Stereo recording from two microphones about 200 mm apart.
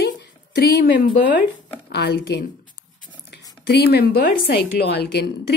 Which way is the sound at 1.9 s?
55° left (ahead or behind).